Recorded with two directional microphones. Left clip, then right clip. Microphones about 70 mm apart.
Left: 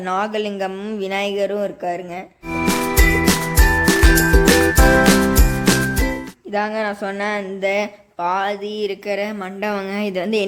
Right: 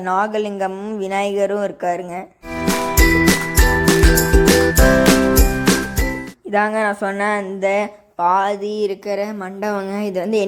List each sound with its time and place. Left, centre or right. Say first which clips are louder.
0.1 s a woman's voice: right 3 dB; right
2.6 s music: right 2 dB; centre
6.5 s speech: right 4 dB; right
7.7 s speech: right 2 dB; right
8.4 s speech: right 3 dB; right
8.9 s a woman's voice: right 1 dB; right
10.0 s a woman's voice: right 1 dB; centre